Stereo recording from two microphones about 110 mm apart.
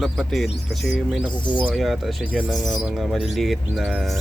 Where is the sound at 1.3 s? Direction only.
45° left (ahead or behind).